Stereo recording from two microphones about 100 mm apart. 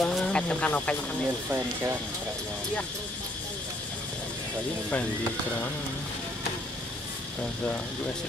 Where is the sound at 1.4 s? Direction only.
20° right (ahead or behind).